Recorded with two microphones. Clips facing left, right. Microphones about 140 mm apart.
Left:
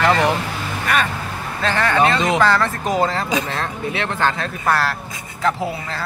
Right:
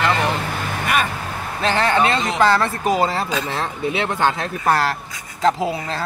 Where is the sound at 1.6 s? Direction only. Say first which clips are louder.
Even; 25° right (ahead or behind).